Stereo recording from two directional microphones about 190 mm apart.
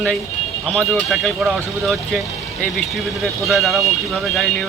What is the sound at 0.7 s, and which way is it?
Speech, centre (ahead or behind).